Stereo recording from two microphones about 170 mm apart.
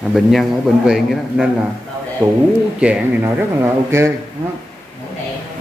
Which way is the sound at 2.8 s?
5° right (ahead or behind).